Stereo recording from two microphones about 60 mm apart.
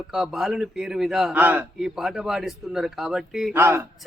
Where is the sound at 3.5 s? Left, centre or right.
Right.